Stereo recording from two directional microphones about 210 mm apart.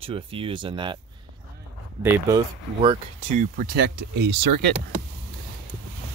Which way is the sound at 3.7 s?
55° right (ahead or behind).